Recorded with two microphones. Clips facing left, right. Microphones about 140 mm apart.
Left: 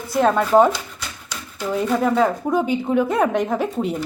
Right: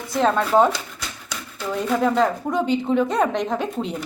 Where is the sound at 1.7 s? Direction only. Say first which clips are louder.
Left 1 dB; 5° left (ahead or behind).